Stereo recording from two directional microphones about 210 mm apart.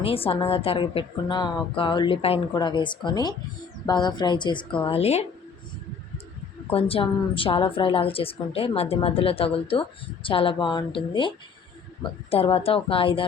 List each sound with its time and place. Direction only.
0.0 s a woman's voice: 25° left (ahead or behind)
6.7 s a woman's voice: 25° left (ahead or behind)
12.3 s a woman's voice: 25° left (ahead or behind)